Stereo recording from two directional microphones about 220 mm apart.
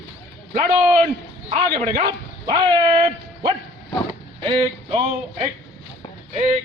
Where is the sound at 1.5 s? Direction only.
30° right (ahead or behind).